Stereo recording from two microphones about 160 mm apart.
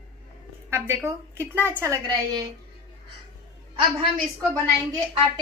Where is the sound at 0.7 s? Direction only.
15° right (ahead or behind).